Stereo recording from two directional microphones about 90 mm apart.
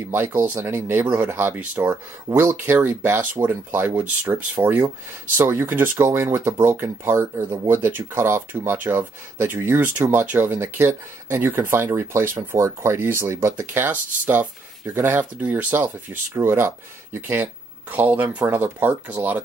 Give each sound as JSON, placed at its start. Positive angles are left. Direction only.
{"t": 0.1, "sound": "speech", "side_deg": -25}